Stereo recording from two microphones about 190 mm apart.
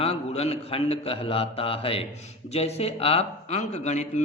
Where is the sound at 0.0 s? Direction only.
30° left (ahead or behind).